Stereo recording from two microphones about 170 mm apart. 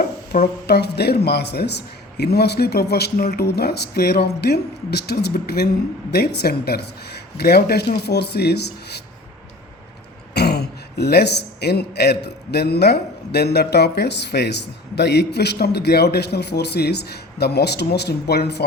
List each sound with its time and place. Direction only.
0.3 s speech: 55° left (ahead or behind)
0.7 s a man's voice: 70° left (ahead or behind)
10.3 s a man's voice: 75° left (ahead or behind)